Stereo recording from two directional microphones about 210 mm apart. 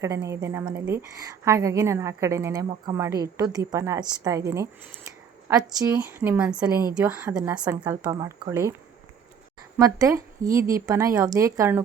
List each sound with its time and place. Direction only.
0.3 s a woman's voice: 15° right (ahead or behind)
9.7 s a woman's voice: 15° right (ahead or behind)